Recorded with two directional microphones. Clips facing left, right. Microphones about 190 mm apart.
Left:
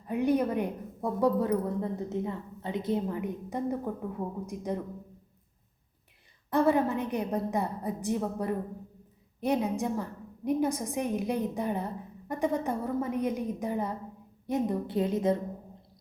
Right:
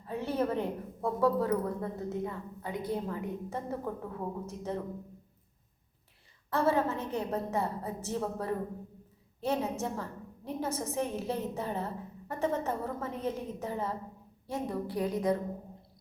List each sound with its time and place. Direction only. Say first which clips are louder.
0.1 s a woman's voice: left 5 dB; 15° left (ahead or behind)
6.5 s a woman's voice: left 3 dB; 15° left (ahead or behind)